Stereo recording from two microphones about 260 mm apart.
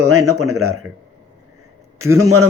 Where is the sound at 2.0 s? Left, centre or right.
Centre.